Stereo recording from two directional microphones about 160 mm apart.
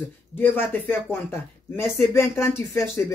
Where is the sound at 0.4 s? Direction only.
10° left (ahead or behind).